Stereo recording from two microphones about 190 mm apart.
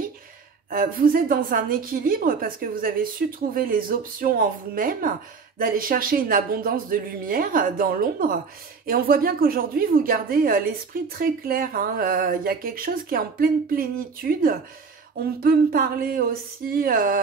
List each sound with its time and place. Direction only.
0.7 s speech: 50° right (ahead or behind)